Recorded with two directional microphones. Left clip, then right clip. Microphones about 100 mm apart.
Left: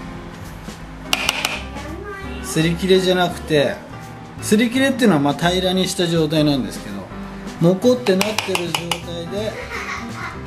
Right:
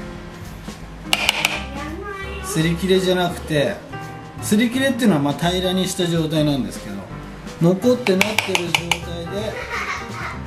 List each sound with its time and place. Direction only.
1.1 s music: centre (ahead or behind)
2.5 s a man's voice: 15° left (ahead or behind)